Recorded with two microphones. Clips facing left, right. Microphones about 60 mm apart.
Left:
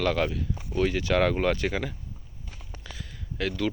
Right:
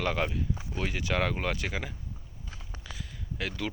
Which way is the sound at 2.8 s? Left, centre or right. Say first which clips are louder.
Left 1 dB; centre.